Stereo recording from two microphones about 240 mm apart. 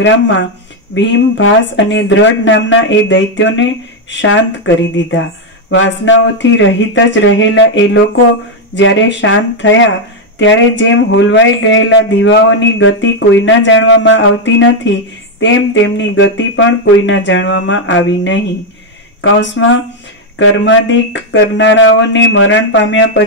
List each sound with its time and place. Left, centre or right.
0.0 s speech: left